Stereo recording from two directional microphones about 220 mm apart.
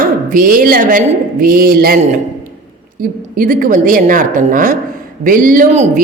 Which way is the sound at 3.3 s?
40° right (ahead or behind).